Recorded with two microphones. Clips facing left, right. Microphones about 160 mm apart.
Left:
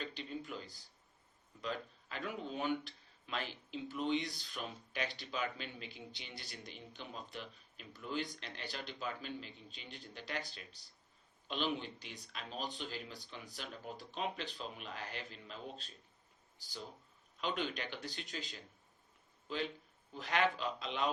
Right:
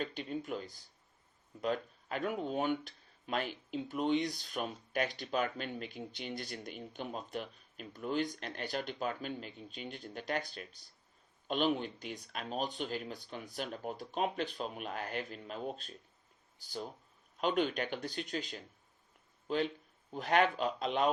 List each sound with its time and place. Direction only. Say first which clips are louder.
0.0 s speech: right 6 dB; 50° right (ahead or behind)
17.3 s speech: right 7 dB; 50° right (ahead or behind)
20.1 s speech: right 5 dB; 45° right (ahead or behind)